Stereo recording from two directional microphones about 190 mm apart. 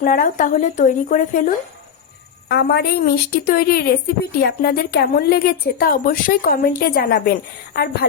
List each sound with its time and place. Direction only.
0.0 s a woman's voice: 45° left (ahead or behind)
2.5 s a woman's voice: 55° left (ahead or behind)